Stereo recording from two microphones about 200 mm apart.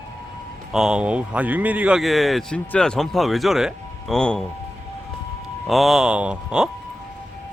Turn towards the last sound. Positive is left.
turn(degrees=-5)  # may be behind; listen again after turning